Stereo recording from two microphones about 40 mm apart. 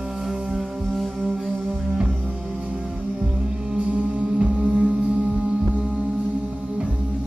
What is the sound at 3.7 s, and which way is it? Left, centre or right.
Music, right.